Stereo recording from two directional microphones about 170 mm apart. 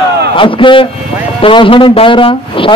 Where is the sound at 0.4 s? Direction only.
30° left (ahead or behind).